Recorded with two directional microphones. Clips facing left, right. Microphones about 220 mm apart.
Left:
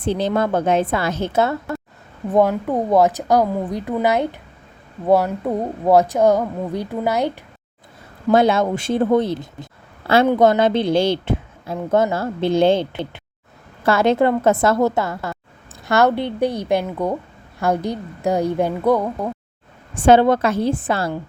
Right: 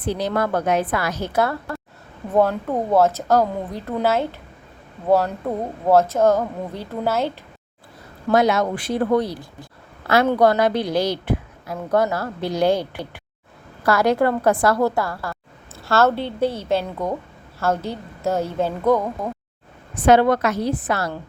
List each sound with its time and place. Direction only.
0.0 s a woman's voice: 25° left (ahead or behind)
8.3 s a woman's voice: 30° left (ahead or behind)
19.9 s a woman's voice: 30° left (ahead or behind)